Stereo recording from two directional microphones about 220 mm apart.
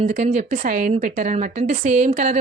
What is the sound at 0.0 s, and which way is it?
A woman's voice, 35° right (ahead or behind).